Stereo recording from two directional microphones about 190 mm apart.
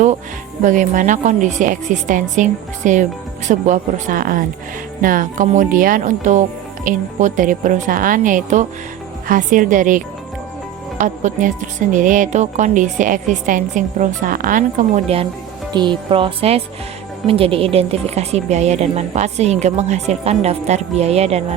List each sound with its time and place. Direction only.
0.6 s speech: 40° right (ahead or behind)
15.7 s speech: 25° right (ahead or behind)